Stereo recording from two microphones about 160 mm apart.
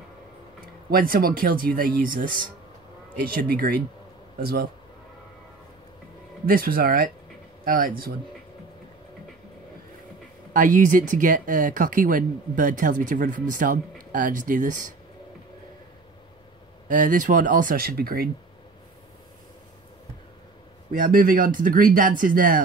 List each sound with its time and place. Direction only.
0.8 s speech: 65° right (ahead or behind)
6.4 s speech: 65° right (ahead or behind)
10.5 s speech: 55° right (ahead or behind)
16.9 s speech: 55° right (ahead or behind)
21.0 s speech: 60° right (ahead or behind)